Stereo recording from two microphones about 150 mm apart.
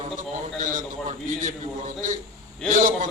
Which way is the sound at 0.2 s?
60° right (ahead or behind).